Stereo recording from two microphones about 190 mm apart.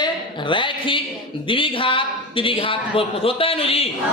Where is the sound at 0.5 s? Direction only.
25° left (ahead or behind).